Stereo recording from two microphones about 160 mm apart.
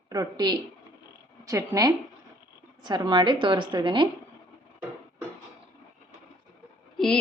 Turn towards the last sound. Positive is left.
turn(degrees=5)  # may be behind; listen again after turning